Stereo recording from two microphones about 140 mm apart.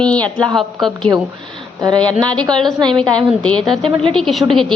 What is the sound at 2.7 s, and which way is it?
Speech, 30° right (ahead or behind).